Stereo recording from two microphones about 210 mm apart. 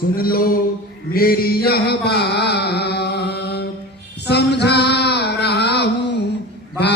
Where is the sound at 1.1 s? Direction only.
45° left (ahead or behind).